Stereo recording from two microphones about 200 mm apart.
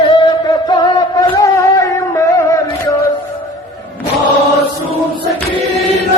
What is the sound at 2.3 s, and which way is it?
Music, 15° left (ahead or behind).